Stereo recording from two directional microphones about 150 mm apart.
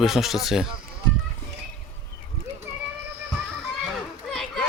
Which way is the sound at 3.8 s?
Centre (ahead or behind).